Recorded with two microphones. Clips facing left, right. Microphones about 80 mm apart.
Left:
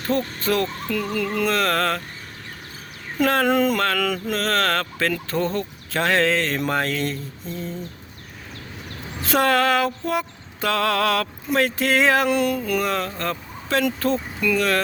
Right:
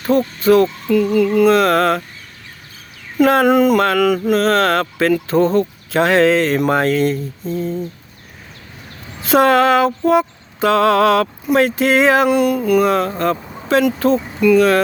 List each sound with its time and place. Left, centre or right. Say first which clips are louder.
0.4 s speech: right 14 dB; centre
3.2 s speech: right 7 dB; centre
9.2 s speech: right 7 dB; right
12.3 s speech: right 7 dB; centre
14.3 s speech: right 9 dB; centre
14.5 s speech: right 9 dB; centre